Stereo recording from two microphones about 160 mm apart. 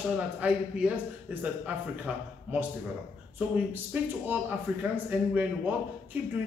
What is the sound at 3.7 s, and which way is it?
Speech, 10° right (ahead or behind).